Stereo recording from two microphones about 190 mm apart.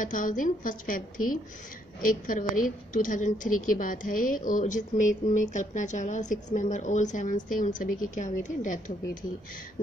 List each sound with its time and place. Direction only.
0.0 s a woman's voice: 45° left (ahead or behind)